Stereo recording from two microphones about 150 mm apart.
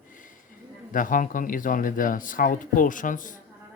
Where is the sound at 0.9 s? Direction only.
65° left (ahead or behind).